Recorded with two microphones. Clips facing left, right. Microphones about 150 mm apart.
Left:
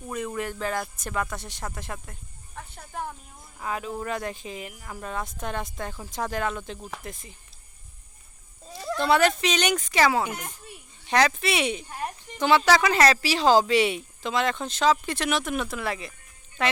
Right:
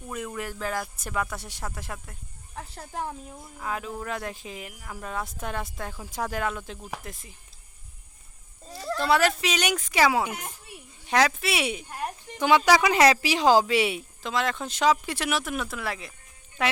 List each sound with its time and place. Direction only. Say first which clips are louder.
0.1 s speech: left 3 dB; centre (ahead or behind)
2.6 s speech: right 1 dB; 35° right (ahead or behind)
3.6 s speech: left 2 dB; centre (ahead or behind)
8.7 s speech: left 1 dB; 5° right (ahead or behind)